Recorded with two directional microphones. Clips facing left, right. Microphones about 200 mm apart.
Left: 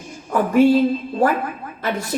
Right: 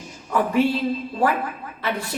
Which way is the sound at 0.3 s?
45° left (ahead or behind).